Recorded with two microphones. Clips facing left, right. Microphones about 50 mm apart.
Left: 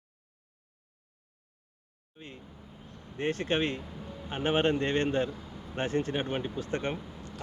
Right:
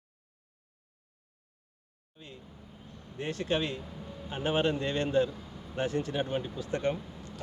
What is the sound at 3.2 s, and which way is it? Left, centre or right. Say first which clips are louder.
Speech: left 2 dB; left.